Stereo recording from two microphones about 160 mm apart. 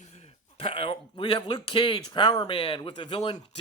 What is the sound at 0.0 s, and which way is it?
A man's voice, 40° left (ahead or behind).